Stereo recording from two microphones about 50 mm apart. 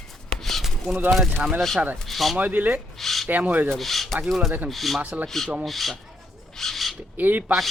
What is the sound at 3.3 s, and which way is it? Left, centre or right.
Speech, right.